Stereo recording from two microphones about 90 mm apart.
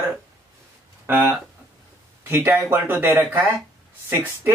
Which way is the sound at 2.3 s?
25° right (ahead or behind).